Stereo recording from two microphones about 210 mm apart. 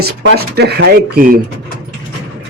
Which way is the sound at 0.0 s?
55° right (ahead or behind).